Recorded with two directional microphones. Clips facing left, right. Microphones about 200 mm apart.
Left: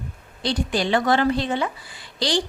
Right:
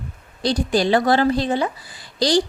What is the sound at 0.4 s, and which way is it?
A woman's voice, 40° right (ahead or behind).